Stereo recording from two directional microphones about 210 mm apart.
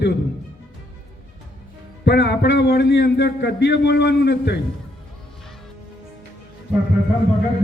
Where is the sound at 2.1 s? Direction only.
50° left (ahead or behind).